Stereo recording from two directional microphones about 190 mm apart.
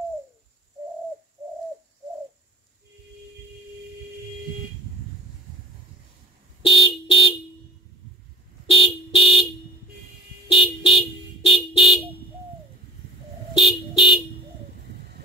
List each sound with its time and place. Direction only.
6.6 s vehicle: 25° left (ahead or behind)
8.6 s vehicle: 30° left (ahead or behind)
10.5 s car: 30° left (ahead or behind)
13.6 s vehicle: 25° left (ahead or behind)
15.0 s a sound: 55° right (ahead or behind)